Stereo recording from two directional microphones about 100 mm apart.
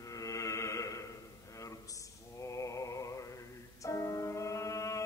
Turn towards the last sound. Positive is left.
turn(degrees=30)  # may be behind; listen again after turning